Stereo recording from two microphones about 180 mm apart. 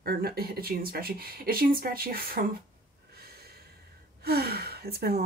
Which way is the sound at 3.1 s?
60° right (ahead or behind).